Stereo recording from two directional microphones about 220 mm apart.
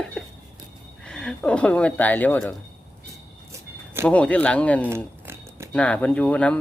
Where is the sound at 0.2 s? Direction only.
5° left (ahead or behind).